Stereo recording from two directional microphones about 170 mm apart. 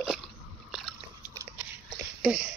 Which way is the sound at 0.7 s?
Centre (ahead or behind).